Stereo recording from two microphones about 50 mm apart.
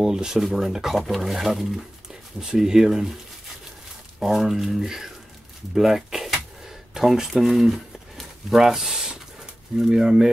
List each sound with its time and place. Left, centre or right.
0.0 s speech: centre
4.2 s speech: centre